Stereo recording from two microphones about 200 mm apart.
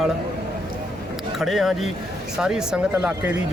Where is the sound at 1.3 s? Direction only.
Centre (ahead or behind).